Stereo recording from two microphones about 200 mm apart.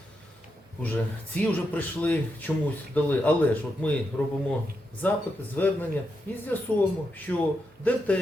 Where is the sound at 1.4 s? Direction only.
5° left (ahead or behind).